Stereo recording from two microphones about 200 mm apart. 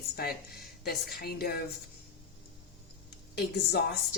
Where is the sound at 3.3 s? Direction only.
55° left (ahead or behind).